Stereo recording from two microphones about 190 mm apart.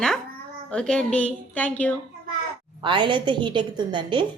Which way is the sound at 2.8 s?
25° right (ahead or behind).